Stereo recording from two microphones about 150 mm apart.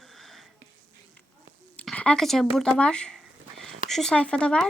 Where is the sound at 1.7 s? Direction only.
5° left (ahead or behind).